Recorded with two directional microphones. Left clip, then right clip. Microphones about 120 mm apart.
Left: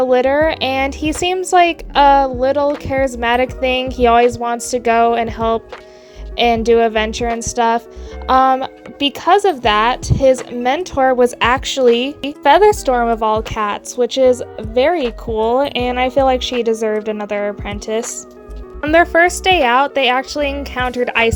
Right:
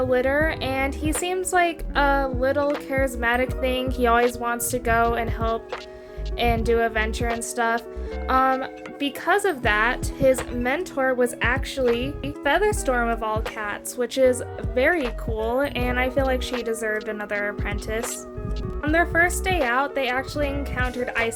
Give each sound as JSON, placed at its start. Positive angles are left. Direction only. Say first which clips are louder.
{"t": 0.0, "sound": "a woman's voice", "louder": "left 8 dB", "side_deg": 60}
{"t": 10.9, "sound": "a woman's voice", "louder": "left 11 dB", "side_deg": 65}
{"t": 12.9, "sound": "a woman's voice", "louder": "left 8 dB", "side_deg": 45}
{"t": 13.6, "sound": "a woman's voice", "louder": "left 11 dB", "side_deg": 70}
{"t": 13.9, "sound": "a woman's voice", "louder": "left 7 dB", "side_deg": 40}
{"t": 18.8, "sound": "a woman's voice", "louder": "left 9 dB", "side_deg": 85}